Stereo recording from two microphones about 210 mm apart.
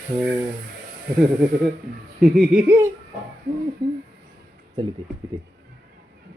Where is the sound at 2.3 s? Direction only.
Centre (ahead or behind).